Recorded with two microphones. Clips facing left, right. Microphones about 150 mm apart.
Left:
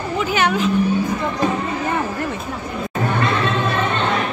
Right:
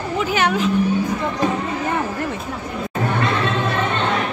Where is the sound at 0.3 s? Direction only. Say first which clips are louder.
Left 1 dB; 45° right (ahead or behind).